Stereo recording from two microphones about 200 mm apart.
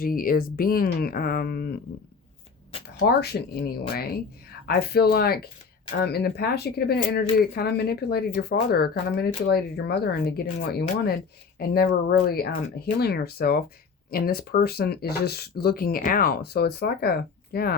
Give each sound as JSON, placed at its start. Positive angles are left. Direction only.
{"t": 0.0, "sound": "speech", "side_deg": 45}
{"t": 3.0, "sound": "speech", "side_deg": 50}